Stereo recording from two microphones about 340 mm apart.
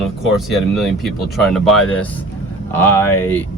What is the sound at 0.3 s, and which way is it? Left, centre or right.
Speech, centre.